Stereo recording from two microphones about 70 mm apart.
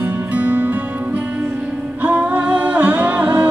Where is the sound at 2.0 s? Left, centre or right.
Right.